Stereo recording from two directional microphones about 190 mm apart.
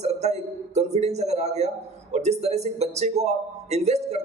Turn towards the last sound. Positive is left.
turn(degrees=-35)  # may be behind; listen again after turning